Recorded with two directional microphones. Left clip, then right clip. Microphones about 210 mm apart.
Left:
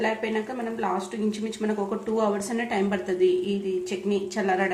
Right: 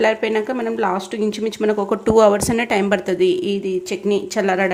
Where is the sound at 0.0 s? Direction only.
50° right (ahead or behind).